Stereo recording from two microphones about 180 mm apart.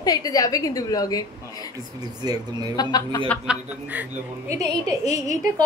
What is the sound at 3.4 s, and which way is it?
A woman's voice, 10° right (ahead or behind).